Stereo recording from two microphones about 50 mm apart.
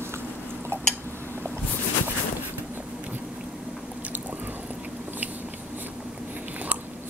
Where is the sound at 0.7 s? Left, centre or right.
Right.